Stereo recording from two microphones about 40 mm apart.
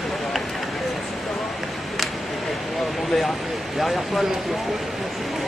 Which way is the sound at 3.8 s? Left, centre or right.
Centre.